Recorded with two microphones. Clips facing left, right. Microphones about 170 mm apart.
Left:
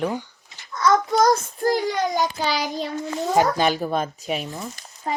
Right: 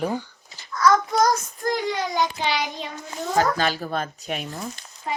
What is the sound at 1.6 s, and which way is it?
Child singing, 40° left (ahead or behind).